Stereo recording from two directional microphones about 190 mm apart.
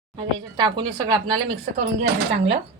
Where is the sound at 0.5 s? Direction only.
25° right (ahead or behind).